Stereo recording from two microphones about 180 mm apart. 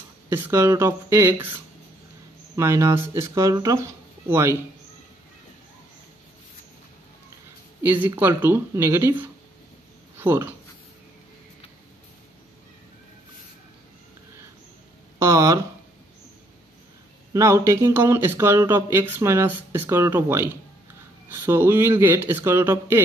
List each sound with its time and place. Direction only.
0.3 s speech: 15° right (ahead or behind)
2.5 s speech: 15° right (ahead or behind)
7.8 s speech: 10° right (ahead or behind)
15.1 s a sound: 15° right (ahead or behind)
17.3 s speech: 15° right (ahead or behind)